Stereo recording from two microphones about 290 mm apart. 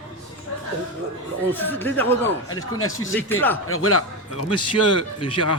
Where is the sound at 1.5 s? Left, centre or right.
Centre.